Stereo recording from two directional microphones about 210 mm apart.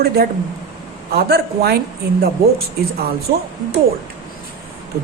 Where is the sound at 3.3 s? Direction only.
45° right (ahead or behind).